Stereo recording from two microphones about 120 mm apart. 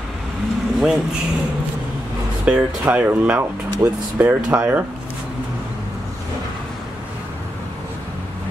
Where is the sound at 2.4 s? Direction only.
10° right (ahead or behind).